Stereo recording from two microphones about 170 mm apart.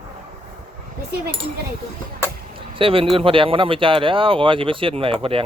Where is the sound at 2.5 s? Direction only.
30° right (ahead or behind).